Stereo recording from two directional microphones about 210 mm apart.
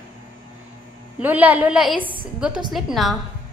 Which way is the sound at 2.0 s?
25° right (ahead or behind).